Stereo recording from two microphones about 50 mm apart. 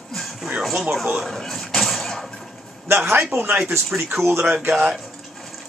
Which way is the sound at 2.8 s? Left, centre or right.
Right.